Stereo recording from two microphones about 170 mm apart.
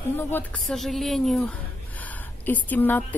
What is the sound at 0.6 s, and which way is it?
A woman's voice, centre (ahead or behind).